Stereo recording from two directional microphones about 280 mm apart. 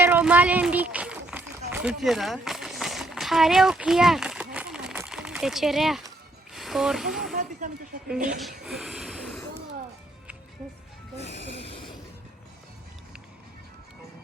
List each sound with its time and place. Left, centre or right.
0.0 s run: centre
6.5 s speech: centre
8.4 s speech: centre
11.6 s a sound: centre